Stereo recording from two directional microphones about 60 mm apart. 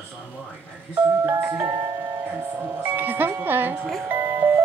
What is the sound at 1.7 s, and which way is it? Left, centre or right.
Music, right.